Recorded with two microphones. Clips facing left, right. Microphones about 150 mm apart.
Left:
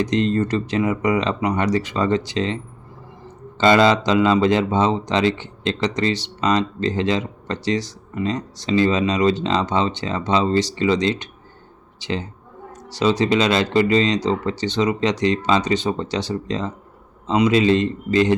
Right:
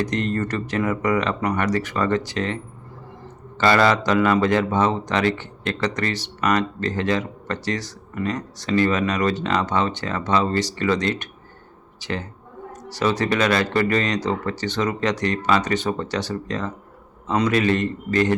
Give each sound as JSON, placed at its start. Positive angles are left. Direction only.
{"t": 0.2, "sound": "a man's voice", "side_deg": 25}
{"t": 3.6, "sound": "a man's voice", "side_deg": 20}
{"t": 13.0, "sound": "a man's voice", "side_deg": 20}